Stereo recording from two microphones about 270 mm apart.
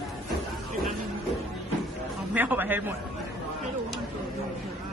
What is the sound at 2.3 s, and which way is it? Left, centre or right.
Speech, centre.